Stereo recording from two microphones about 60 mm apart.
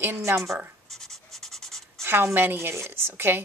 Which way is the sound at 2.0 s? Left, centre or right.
Right.